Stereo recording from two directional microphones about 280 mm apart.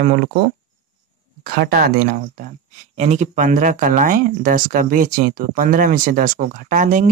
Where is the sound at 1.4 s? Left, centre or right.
Right.